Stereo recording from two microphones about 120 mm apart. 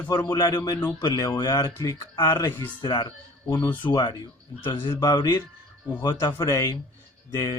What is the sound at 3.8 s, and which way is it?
Speech, 40° left (ahead or behind).